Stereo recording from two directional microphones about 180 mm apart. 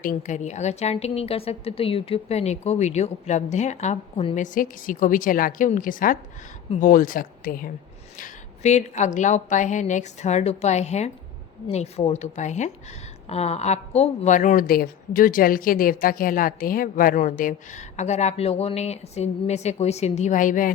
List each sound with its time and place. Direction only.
0.0 s a woman's voice: 50° left (ahead or behind)
4.4 s speech: 45° left (ahead or behind)
8.2 s a woman's voice: 40° left (ahead or behind)